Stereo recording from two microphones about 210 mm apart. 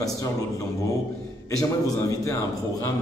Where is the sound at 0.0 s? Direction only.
15° left (ahead or behind).